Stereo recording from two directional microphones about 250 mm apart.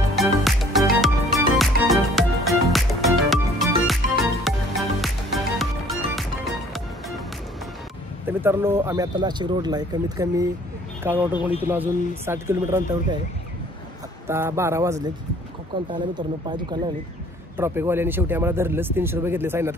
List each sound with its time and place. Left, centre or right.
0.1 s music: centre
8.3 s speech: centre
14.2 s speech: centre